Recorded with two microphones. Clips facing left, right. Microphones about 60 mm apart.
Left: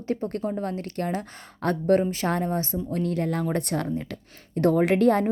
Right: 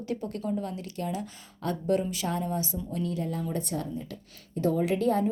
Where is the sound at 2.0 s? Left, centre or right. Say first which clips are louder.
Left 5 dB; left.